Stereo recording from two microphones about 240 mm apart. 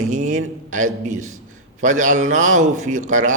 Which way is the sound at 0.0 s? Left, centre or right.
Right.